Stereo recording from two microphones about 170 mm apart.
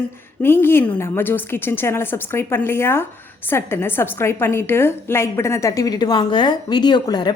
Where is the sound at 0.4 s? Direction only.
15° left (ahead or behind).